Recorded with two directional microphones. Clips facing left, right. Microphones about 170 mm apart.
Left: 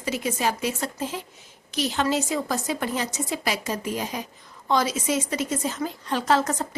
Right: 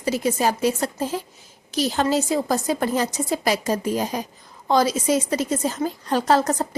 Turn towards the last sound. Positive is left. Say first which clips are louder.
# right 4 dB
turn(degrees=-35)  # may be behind; listen again after turning